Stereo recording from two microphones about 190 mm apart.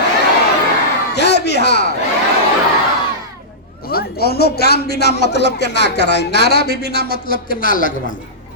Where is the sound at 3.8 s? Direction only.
55° left (ahead or behind).